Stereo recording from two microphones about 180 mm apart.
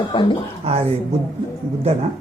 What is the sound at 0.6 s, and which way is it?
Speech, 35° right (ahead or behind).